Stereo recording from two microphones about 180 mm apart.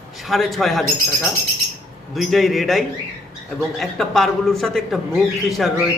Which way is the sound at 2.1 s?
Centre (ahead or behind).